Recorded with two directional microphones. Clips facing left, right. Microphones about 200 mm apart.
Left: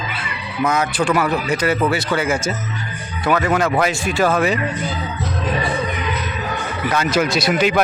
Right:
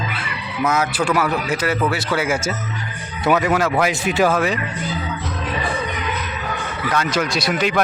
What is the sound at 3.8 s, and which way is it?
Speech, 15° right (ahead or behind).